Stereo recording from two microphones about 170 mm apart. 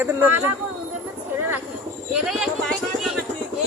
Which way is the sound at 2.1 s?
5° right (ahead or behind).